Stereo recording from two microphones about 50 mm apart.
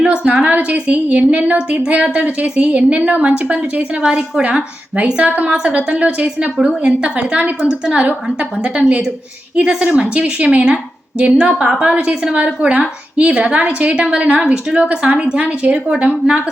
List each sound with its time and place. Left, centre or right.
0.0 s a woman's voice: right
4.0 s a woman's voice: centre
4.9 s a woman's voice: right
7.6 s a woman's voice: centre
9.6 s a woman's voice: right